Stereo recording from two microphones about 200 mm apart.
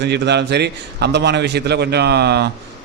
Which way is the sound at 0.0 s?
55° right (ahead or behind).